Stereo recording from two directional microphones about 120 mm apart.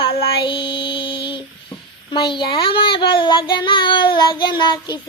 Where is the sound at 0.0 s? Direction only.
45° left (ahead or behind).